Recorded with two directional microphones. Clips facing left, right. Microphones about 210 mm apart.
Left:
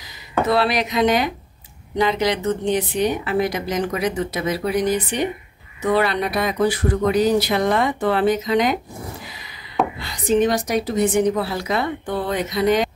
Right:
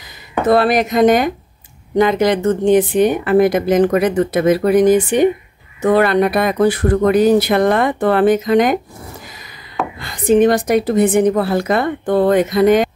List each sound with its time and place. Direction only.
0.5 s a woman's voice: 50° right (ahead or behind)
9.9 s a woman's voice: 50° right (ahead or behind)